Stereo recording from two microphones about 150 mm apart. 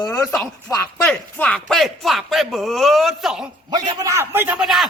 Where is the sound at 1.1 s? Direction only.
5° left (ahead or behind).